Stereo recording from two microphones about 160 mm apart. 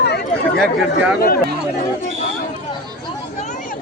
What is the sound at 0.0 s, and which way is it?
Chatter, 90° left.